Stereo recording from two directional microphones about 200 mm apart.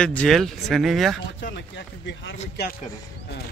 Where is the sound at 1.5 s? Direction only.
60° left (ahead or behind).